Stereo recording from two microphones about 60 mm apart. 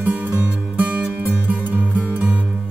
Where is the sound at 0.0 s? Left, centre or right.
Right.